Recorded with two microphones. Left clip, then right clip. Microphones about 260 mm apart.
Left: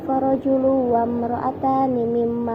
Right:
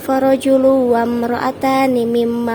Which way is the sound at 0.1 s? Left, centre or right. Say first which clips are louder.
Right 7 dB; right.